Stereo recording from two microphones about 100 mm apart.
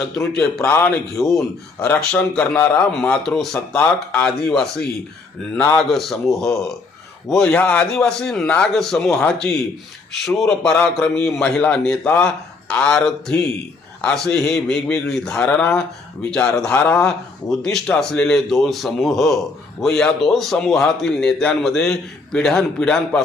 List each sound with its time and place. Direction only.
0.2 s a man's voice: 5° left (ahead or behind)
0.7 s speech: 20° left (ahead or behind)
1.2 s a man's voice: centre (ahead or behind); by 17.1 s 20° left (ahead or behind)
17.1 s a man's voice: 5° left (ahead or behind)